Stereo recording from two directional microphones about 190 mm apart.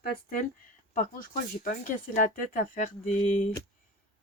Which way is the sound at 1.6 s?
45° left (ahead or behind).